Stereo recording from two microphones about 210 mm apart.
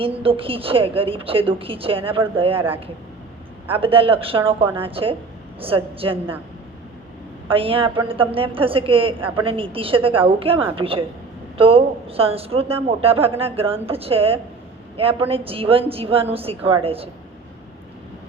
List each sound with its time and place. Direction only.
0.0 s a woman's voice: 25° right (ahead or behind)
3.7 s a woman's voice: 25° right (ahead or behind)
7.4 s a woman's voice: 25° right (ahead or behind)